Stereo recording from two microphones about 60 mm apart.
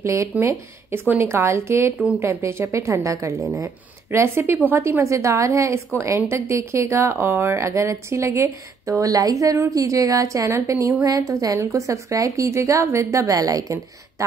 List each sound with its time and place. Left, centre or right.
0.0 s speech: right
4.1 s speech: right
11.1 s a woman's voice: right